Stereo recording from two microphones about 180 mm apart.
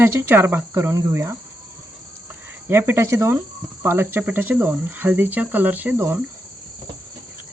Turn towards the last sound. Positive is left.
turn(degrees=-10)  # may be behind; listen again after turning